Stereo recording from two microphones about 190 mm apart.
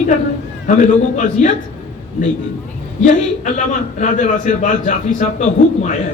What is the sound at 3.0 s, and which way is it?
A man's voice, 40° left (ahead or behind).